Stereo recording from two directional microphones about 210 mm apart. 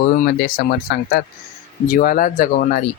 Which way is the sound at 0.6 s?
50° left (ahead or behind).